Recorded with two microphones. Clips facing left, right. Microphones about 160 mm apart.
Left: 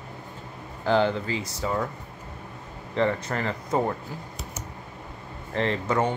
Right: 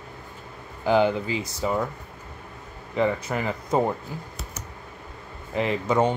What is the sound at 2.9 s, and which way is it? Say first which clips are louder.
Speech: right 1 dB; 10° right (ahead or behind).